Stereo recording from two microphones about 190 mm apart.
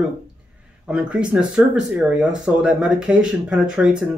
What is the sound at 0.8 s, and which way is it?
Speech, 5° right (ahead or behind).